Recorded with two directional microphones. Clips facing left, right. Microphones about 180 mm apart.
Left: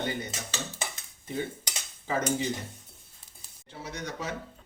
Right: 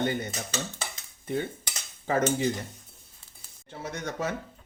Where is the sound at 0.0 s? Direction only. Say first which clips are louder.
Right 4 dB; 55° right (ahead or behind).